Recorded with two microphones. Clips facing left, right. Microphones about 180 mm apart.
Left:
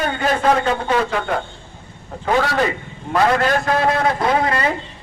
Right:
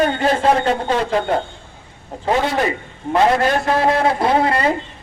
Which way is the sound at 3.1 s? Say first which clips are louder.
Right 1 dB; 25° right (ahead or behind).